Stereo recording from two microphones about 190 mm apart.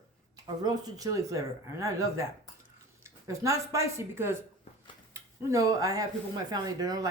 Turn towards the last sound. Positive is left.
turn(degrees=-20)  # may be behind; listen again after turning